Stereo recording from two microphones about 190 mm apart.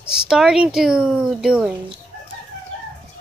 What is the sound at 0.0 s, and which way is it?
A woman's voice, 5° right (ahead or behind).